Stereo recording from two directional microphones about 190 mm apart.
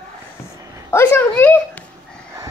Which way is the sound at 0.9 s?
10° left (ahead or behind).